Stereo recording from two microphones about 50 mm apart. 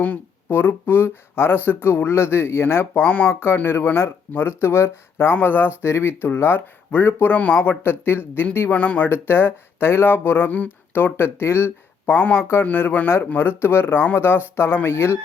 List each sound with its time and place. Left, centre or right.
0.4 s speech: left
3.0 s speech: left
3.2 s speech: left
5.3 s speech: left
5.8 s speech: left
7.3 s speech: left
7.9 s speech: left
8.7 s speech: left
9.0 s speech: left
12.1 s speech: left
12.6 s speech: left
13.6 s speech: left